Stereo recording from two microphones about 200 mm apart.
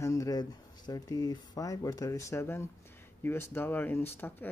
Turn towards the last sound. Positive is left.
turn(degrees=10)  # may be behind; listen again after turning